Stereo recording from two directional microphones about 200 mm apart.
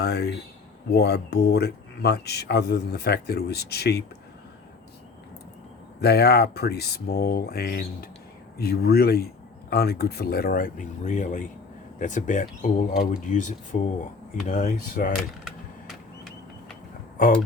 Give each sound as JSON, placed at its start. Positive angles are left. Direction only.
{"t": 0.0, "sound": "speech", "side_deg": 55}
{"t": 6.0, "sound": "speech", "side_deg": 55}